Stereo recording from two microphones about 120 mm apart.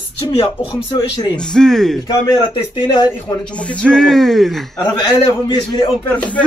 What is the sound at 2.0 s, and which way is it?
Speech, 35° left (ahead or behind).